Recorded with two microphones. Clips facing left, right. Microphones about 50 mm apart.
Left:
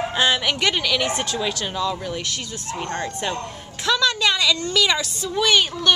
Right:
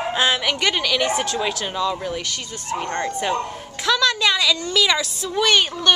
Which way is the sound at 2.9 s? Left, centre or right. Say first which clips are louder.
Right 3 dB; centre.